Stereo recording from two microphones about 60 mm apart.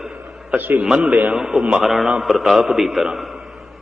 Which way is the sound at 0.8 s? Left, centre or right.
Centre.